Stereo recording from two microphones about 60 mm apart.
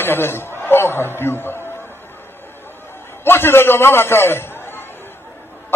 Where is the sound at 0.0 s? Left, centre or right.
Left.